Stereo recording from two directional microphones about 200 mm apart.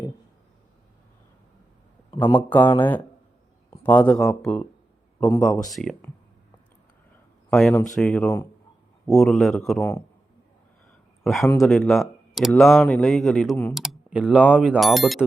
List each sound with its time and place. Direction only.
2.0 s a sound: 25° left (ahead or behind)
2.5 s speech: 10° left (ahead or behind)
7.5 s speech: 5° left (ahead or behind)
11.2 s speech: centre (ahead or behind)